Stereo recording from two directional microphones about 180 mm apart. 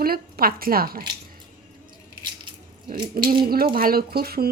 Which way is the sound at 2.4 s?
25° right (ahead or behind).